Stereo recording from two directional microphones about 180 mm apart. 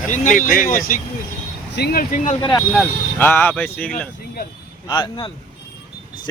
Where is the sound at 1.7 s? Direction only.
60° left (ahead or behind).